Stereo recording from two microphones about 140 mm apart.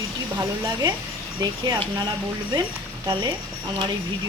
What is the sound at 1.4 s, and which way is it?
Speech, 30° right (ahead or behind).